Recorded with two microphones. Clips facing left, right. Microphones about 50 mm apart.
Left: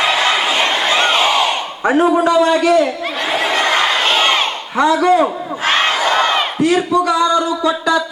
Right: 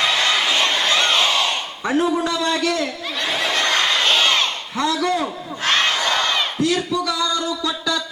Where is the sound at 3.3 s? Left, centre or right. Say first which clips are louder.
Left 5 dB; left.